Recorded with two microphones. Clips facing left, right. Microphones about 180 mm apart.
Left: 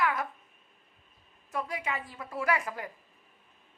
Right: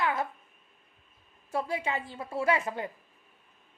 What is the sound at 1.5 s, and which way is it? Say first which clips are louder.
A woman's voice: right 3 dB; 30° right (ahead or behind).